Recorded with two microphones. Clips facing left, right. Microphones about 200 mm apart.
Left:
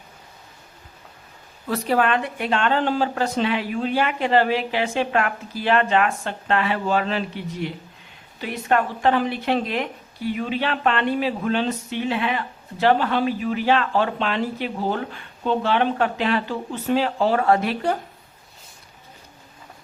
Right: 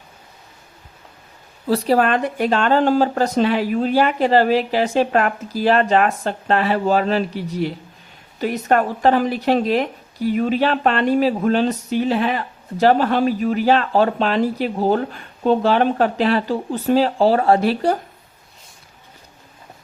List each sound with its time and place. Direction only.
1.6 s speech: 35° right (ahead or behind)